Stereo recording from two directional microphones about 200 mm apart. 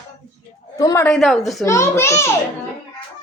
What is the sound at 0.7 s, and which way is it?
Speech, 15° left (ahead or behind).